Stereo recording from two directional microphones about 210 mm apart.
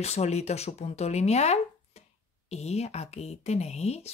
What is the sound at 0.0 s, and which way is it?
Speech, 30° left (ahead or behind).